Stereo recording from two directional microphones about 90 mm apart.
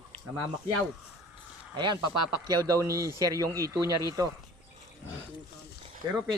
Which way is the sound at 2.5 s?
40° right (ahead or behind).